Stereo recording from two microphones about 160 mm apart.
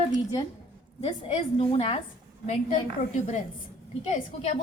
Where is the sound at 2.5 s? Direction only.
50° left (ahead or behind).